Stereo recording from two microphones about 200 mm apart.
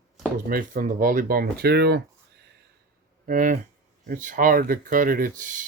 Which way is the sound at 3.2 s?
40° right (ahead or behind).